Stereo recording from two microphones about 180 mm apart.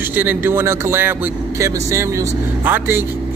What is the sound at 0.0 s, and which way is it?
A man's voice, 10° right (ahead or behind).